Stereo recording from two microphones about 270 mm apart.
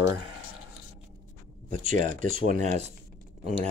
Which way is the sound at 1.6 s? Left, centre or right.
Right.